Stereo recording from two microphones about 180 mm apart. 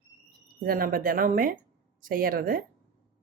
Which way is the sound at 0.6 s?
55° right (ahead or behind).